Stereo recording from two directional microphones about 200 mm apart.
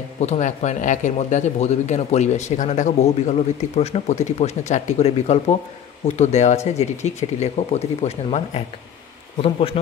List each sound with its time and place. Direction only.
0.2 s a man's voice: 35° left (ahead or behind)